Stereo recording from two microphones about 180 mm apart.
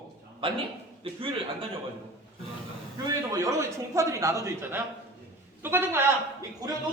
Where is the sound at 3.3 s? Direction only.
20° right (ahead or behind).